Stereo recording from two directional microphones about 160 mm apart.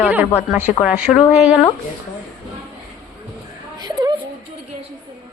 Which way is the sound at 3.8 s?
25° right (ahead or behind).